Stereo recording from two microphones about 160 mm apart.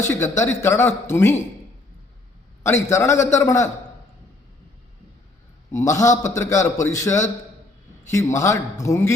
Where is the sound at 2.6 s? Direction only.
15° left (ahead or behind).